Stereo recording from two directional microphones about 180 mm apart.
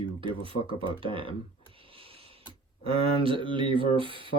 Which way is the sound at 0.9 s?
30° right (ahead or behind).